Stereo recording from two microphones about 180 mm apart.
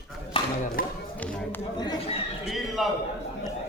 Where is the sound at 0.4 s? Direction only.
30° left (ahead or behind).